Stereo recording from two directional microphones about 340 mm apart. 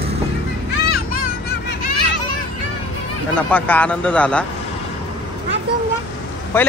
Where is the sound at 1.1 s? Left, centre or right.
Left.